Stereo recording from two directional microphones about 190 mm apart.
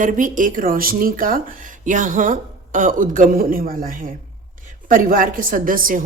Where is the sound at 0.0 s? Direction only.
45° right (ahead or behind).